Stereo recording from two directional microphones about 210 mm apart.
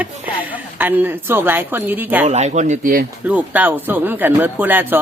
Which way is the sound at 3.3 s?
5° right (ahead or behind).